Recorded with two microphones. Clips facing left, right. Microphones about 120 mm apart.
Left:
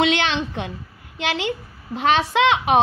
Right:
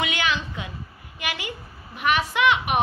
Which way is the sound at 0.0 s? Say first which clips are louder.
Left 6 dB; 75° left (ahead or behind).